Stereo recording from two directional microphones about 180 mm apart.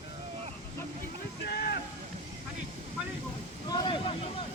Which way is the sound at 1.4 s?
60° left (ahead or behind).